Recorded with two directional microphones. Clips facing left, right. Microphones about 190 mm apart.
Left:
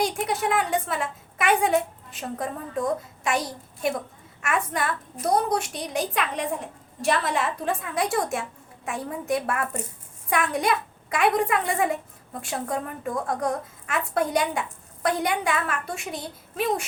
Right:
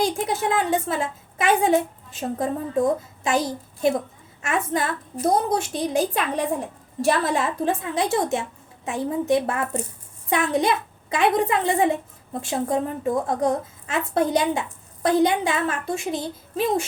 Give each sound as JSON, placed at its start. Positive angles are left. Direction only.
{"t": 0.0, "sound": "a child's voice", "side_deg": -25}